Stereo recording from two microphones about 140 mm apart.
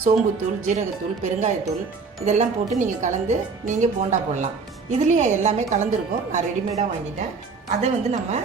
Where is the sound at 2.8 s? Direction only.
60° right (ahead or behind).